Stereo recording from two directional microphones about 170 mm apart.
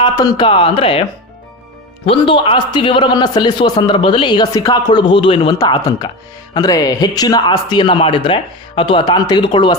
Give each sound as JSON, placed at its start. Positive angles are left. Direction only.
{"t": 0.0, "sound": "speech", "side_deg": 25}
{"t": 2.0, "sound": "a man's voice", "side_deg": 30}